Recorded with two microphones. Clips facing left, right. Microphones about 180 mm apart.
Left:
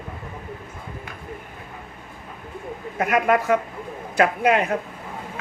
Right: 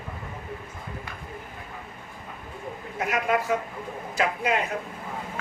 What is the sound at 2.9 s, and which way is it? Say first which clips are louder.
Speech: left 6 dB; 55° left (ahead or behind).